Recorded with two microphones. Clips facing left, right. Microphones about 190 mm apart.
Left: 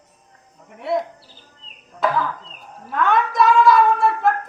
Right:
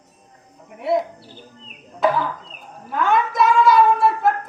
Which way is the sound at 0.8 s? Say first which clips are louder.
Right 2 dB; centre (ahead or behind).